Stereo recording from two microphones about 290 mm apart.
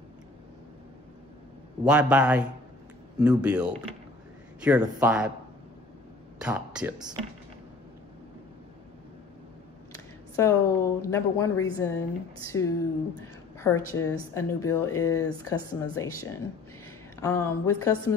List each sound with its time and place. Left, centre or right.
1.9 s speech: centre
6.4 s speech: centre
9.9 s speech: centre
17.2 s speech: centre